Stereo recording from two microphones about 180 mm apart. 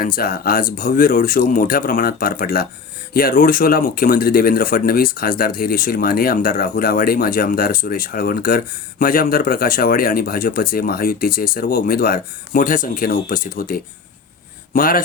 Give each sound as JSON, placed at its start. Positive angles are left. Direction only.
{"t": 0.2, "sound": "speech", "side_deg": 55}